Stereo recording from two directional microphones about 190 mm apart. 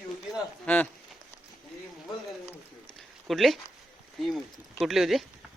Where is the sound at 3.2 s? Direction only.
Centre (ahead or behind).